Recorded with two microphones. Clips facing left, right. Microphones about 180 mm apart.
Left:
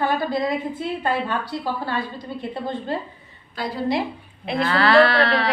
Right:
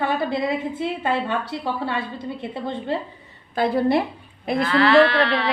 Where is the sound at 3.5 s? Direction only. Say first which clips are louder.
Right 5 dB; 55° right (ahead or behind).